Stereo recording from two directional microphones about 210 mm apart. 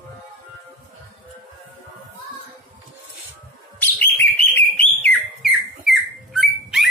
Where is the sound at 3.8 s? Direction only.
10° left (ahead or behind).